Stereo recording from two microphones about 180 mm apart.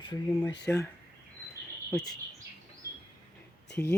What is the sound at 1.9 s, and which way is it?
Speech, centre (ahead or behind).